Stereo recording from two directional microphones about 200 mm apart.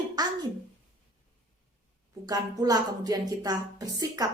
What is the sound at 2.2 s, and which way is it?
A woman's voice, 20° right (ahead or behind).